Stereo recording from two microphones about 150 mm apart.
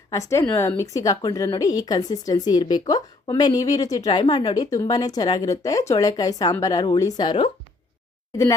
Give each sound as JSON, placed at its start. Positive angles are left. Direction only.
{"t": 0.1, "sound": "a woman's voice", "side_deg": 20}